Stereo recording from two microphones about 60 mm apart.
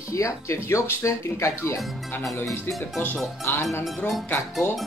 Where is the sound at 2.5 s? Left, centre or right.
Left.